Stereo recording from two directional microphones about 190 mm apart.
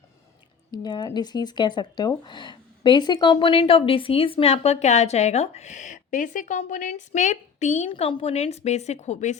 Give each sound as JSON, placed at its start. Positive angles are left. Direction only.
{"t": 0.7, "sound": "speech", "side_deg": 20}